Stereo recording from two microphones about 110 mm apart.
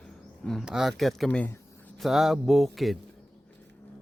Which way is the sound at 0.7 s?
5° right (ahead or behind).